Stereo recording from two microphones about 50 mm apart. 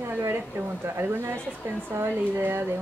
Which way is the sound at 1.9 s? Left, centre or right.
Right.